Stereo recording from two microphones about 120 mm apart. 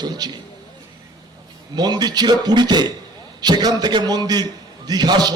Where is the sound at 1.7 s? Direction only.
35° right (ahead or behind).